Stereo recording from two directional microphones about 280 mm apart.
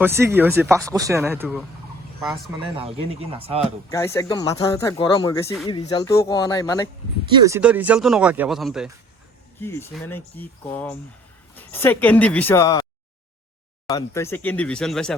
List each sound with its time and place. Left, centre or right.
0.0 s speech: centre
2.7 s speech: centre
3.8 s speech: centre
7.3 s speech: centre
13.8 s speech: centre